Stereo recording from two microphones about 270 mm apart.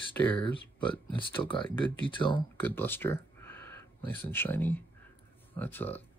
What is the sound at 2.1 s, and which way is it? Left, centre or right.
Speech, centre.